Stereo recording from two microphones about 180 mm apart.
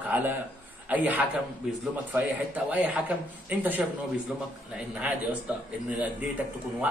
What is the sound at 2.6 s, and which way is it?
A man's voice, 10° right (ahead or behind).